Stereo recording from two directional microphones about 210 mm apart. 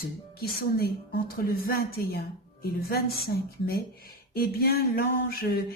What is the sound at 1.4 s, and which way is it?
A woman's voice, 45° left (ahead or behind).